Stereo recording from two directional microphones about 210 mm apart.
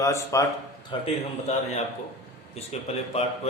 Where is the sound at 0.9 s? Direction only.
25° left (ahead or behind).